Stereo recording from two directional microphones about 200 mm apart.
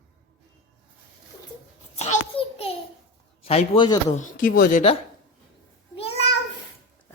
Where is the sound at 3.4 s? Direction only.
30° left (ahead or behind).